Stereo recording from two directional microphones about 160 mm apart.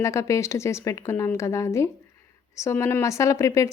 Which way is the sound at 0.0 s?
20° left (ahead or behind).